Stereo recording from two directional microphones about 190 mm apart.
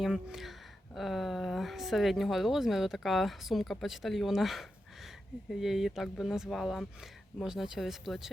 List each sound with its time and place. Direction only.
0.0 s a woman's voice: centre (ahead or behind)